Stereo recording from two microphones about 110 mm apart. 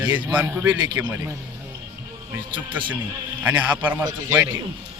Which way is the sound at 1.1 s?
25° right (ahead or behind).